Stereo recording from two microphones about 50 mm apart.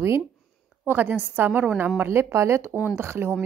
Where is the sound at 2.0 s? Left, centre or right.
Right.